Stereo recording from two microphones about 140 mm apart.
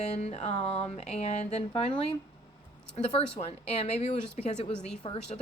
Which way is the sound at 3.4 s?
45° left (ahead or behind).